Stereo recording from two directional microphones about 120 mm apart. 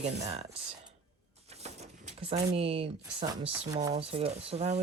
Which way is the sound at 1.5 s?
65° right (ahead or behind).